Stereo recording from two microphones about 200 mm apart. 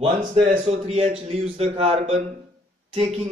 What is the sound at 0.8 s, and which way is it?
A man's voice, 30° right (ahead or behind).